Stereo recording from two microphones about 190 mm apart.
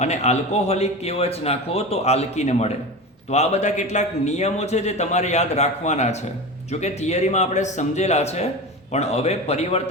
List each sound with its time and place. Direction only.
0.0 s speech: 35° left (ahead or behind)